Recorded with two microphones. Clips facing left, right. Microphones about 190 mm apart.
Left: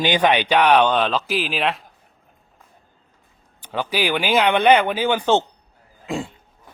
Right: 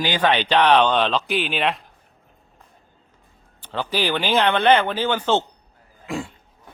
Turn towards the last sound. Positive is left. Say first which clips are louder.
# left 2 dB
turn(degrees=25)  # may be behind; listen again after turning